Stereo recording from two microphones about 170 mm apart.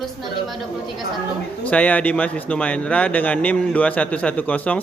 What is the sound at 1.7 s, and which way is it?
A man's voice, 10° left (ahead or behind).